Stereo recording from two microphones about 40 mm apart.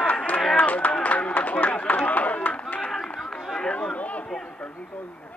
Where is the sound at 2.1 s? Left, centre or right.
Left.